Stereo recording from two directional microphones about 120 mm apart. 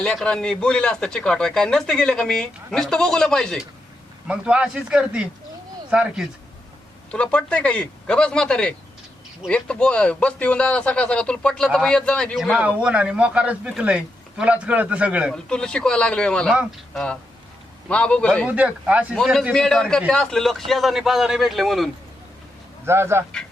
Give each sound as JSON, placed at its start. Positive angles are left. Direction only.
{"t": 0.0, "sound": "speech", "side_deg": 5}
{"t": 4.3, "sound": "a man's voice", "side_deg": -10}
{"t": 7.1, "sound": "a man's voice", "side_deg": 10}
{"t": 12.5, "sound": "a man's voice", "side_deg": -10}
{"t": 15.3, "sound": "a man's voice", "side_deg": 5}
{"t": 18.4, "sound": "a man's voice", "side_deg": -10}
{"t": 19.1, "sound": "speech", "side_deg": 5}
{"t": 22.9, "sound": "speech", "side_deg": -20}